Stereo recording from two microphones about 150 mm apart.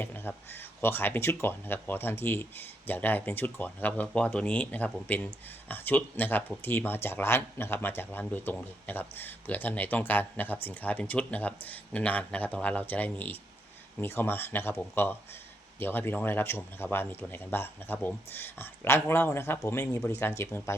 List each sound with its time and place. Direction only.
0.0 s speech: 15° left (ahead or behind)